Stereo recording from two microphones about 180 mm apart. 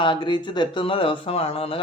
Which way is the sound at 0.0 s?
25° left (ahead or behind).